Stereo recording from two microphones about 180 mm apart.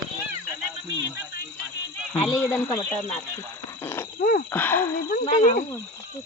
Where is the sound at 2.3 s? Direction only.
10° left (ahead or behind).